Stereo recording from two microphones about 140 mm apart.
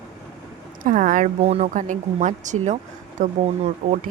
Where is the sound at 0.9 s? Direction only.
70° right (ahead or behind).